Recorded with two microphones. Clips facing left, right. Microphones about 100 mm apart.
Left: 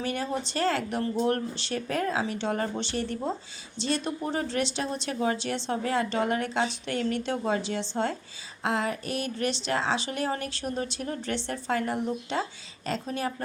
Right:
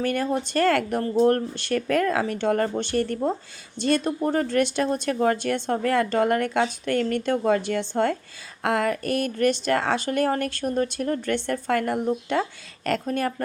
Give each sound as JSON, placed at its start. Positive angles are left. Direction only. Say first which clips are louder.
{"t": 0.0, "sound": "a woman's voice", "louder": "right 6 dB", "side_deg": -50}